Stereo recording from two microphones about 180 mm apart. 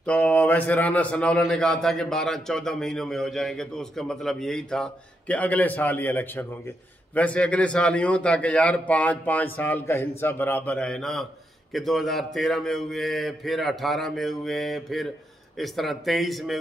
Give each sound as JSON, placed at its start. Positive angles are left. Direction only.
{"t": 0.0, "sound": "a man's voice", "side_deg": 5}